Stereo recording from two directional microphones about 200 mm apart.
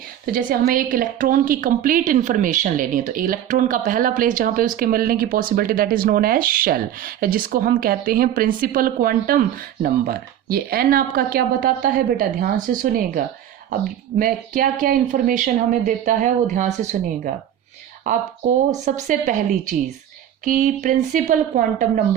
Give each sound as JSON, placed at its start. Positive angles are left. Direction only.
{"t": 0.3, "sound": "a woman's voice", "side_deg": -45}